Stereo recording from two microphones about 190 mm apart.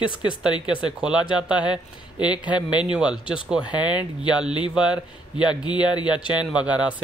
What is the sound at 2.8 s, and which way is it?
Speech, 5° right (ahead or behind).